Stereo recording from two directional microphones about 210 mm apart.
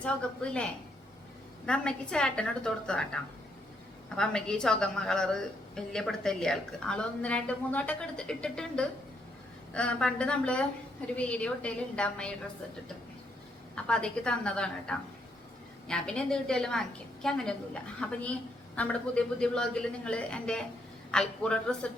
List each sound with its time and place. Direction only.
0.0 s a woman's voice: 5° left (ahead or behind)
13.7 s a woman's voice: 5° left (ahead or behind)